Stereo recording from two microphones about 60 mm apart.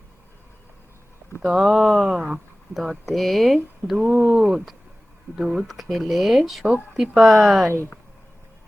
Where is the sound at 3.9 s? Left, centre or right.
Centre.